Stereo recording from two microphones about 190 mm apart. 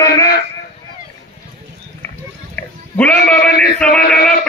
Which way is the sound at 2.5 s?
10° left (ahead or behind).